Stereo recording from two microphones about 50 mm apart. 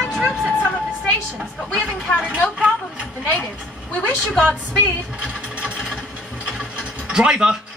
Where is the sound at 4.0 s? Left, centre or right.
Centre.